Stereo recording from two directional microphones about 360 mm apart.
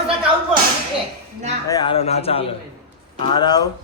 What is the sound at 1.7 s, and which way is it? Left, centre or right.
A man's voice, centre.